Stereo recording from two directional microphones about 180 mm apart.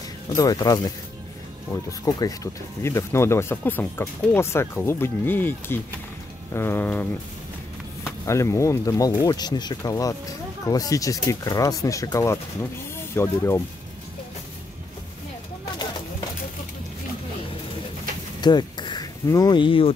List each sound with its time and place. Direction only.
0.4 s speech: 20° left (ahead or behind)
8.3 s speech: 15° left (ahead or behind)
18.4 s speech: 25° left (ahead or behind)